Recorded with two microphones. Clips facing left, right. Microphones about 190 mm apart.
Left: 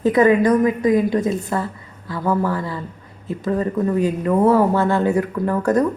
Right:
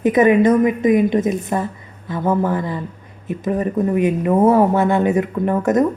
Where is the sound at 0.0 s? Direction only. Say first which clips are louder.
Right 1 dB; 20° right (ahead or behind).